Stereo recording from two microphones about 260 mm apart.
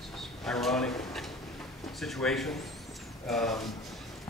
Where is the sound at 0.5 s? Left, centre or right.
Centre.